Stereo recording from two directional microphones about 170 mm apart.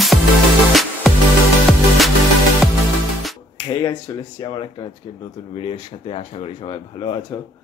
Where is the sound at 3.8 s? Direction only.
25° left (ahead or behind).